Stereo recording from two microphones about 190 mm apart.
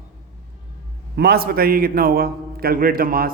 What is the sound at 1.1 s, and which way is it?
Speech, 60° right (ahead or behind).